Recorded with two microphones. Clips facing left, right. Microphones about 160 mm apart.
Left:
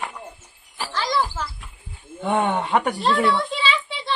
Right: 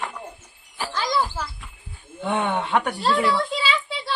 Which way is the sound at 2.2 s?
5° left (ahead or behind).